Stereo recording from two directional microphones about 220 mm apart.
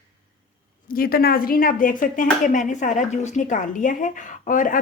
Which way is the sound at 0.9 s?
40° left (ahead or behind).